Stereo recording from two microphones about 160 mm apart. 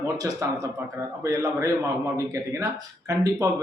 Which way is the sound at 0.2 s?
20° right (ahead or behind).